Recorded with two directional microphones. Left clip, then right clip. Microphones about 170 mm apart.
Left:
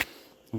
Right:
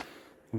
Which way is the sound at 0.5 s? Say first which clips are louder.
Left 1 dB; 15° left (ahead or behind).